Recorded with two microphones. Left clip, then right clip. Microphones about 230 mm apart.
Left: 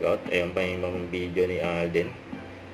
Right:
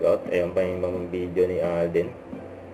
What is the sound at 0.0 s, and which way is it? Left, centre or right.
Speech, left.